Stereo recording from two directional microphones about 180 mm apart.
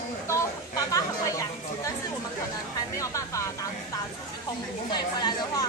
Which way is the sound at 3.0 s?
15° left (ahead or behind).